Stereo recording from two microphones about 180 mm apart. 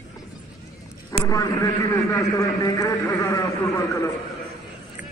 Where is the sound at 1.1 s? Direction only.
20° left (ahead or behind).